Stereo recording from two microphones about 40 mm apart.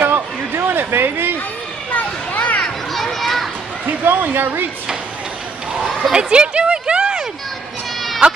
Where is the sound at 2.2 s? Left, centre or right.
Left.